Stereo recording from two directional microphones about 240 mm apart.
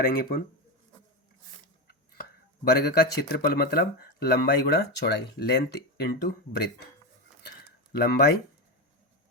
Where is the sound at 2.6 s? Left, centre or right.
Left.